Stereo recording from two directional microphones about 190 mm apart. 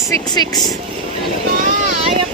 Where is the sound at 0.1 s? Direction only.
20° left (ahead or behind).